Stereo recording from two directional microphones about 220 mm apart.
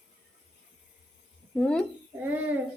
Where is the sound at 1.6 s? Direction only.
5° left (ahead or behind).